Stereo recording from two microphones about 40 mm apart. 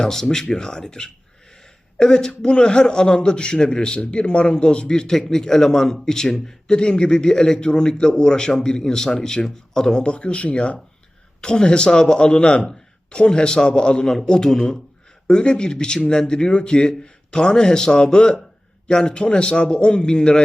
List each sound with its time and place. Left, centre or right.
0.0 s a man's voice: centre
6.7 s a man's voice: left